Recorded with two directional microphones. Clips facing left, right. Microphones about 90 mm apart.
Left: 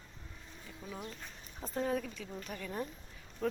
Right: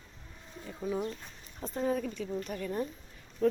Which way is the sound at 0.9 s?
30° right (ahead or behind).